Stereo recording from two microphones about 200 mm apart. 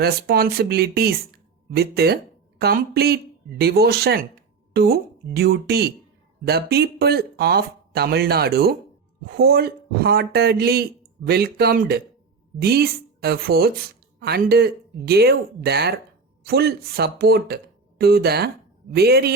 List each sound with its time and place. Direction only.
0.0 s a woman's voice: 50° right (ahead or behind)